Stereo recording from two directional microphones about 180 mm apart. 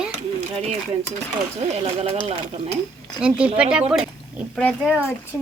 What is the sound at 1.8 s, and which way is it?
Speech, 35° right (ahead or behind).